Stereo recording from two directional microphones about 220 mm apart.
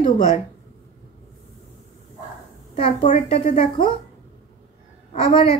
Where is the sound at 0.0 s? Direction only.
30° left (ahead or behind).